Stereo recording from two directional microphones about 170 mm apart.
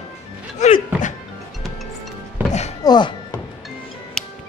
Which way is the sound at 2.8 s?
25° left (ahead or behind).